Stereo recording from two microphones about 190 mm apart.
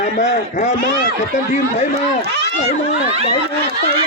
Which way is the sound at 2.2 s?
65° right (ahead or behind).